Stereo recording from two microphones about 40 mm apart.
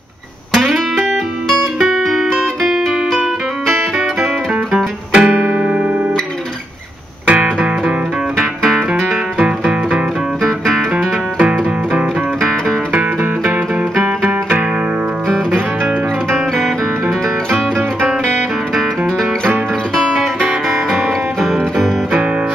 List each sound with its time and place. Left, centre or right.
0.5 s music: centre
3.1 s music: centre
4.7 s music: right
5.3 s keyboard: right
7.2 s music: right
8.4 s music: centre
9.4 s music: right
12.4 s music: centre
14.0 s music: right
15.5 s guitar: right
20.4 s music: centre